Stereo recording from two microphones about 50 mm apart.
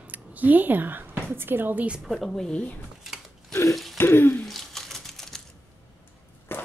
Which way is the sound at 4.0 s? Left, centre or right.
Left.